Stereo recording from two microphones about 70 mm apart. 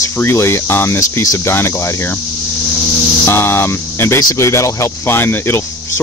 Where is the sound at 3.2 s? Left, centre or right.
Left.